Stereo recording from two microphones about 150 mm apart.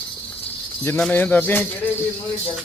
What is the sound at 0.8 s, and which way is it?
Speech, 10° left (ahead or behind).